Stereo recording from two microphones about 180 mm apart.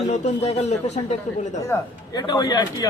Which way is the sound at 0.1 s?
35° left (ahead or behind).